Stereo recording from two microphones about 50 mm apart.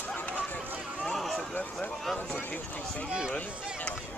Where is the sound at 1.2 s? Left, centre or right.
Centre.